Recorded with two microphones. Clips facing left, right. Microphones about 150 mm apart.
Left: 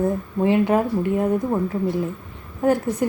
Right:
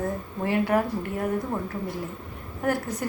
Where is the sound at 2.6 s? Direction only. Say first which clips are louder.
Left 8 dB; 20° left (ahead or behind).